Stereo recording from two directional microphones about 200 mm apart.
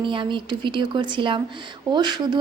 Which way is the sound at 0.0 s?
25° right (ahead or behind).